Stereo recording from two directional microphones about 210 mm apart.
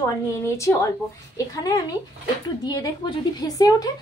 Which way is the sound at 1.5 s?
15° left (ahead or behind).